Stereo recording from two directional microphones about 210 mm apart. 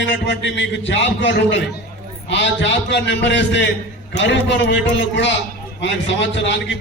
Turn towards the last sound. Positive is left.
turn(degrees=60)  # may be behind; listen again after turning